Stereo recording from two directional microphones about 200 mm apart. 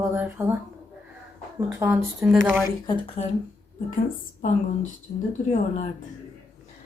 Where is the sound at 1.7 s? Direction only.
15° right (ahead or behind).